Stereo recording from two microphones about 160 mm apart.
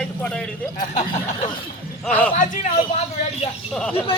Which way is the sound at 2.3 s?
50° left (ahead or behind).